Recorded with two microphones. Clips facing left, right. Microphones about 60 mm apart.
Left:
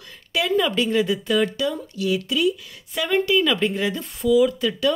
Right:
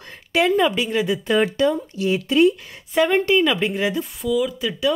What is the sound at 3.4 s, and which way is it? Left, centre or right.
Speech, centre.